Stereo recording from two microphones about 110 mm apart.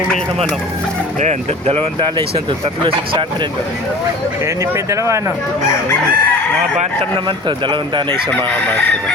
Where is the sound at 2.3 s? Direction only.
55° right (ahead or behind).